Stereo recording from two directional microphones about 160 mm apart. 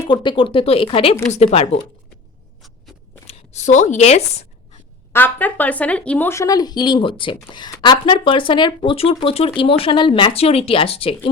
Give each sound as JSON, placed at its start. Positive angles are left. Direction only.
{"t": 0.1, "sound": "a woman's voice", "side_deg": 30}
{"t": 2.6, "sound": "a sound", "side_deg": 0}
{"t": 3.2, "sound": "speech", "side_deg": 45}
{"t": 5.1, "sound": "a woman's voice", "side_deg": 10}